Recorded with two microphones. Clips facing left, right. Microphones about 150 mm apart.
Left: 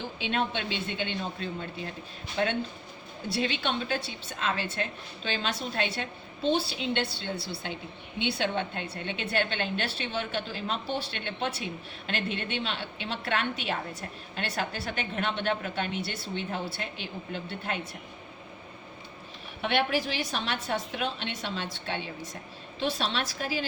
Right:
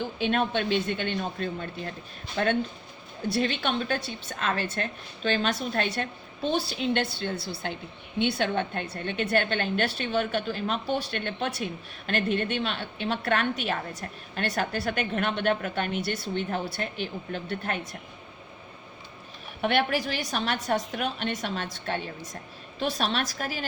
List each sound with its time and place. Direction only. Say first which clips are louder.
0.2 s a woman's voice: right 4 dB; 50° right (ahead or behind)
3.3 s a woman's voice: right 2 dB; 50° right (ahead or behind)
19.6 s a woman's voice: right 2 dB; 45° right (ahead or behind)